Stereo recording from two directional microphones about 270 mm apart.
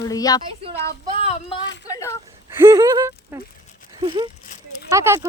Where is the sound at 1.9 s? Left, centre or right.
Centre.